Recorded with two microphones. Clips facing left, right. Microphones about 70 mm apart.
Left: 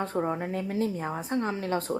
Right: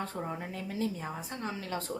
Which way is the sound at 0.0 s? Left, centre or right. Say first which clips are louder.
Left 8 dB; left.